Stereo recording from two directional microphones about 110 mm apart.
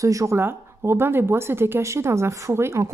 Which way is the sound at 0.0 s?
30° right (ahead or behind).